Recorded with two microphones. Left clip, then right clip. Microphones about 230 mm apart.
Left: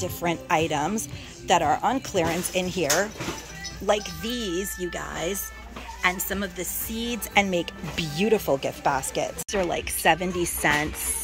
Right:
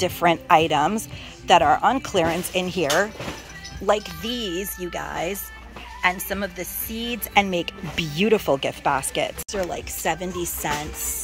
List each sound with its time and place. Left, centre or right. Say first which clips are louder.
0.0 s a woman's voice: right 8 dB; centre